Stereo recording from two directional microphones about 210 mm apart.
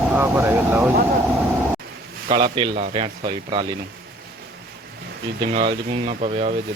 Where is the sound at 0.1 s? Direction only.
10° right (ahead or behind).